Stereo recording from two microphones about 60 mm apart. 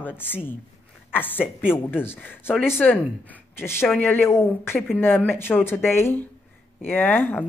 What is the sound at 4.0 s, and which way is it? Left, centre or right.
Speech, left.